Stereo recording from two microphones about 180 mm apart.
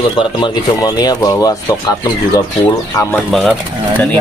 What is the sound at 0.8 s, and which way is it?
Speech, 20° left (ahead or behind).